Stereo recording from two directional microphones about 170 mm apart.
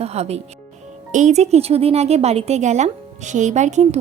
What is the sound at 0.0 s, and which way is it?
A woman's voice, 40° right (ahead or behind).